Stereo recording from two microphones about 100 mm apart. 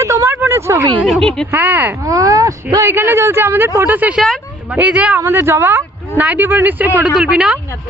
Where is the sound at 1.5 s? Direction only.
15° right (ahead or behind).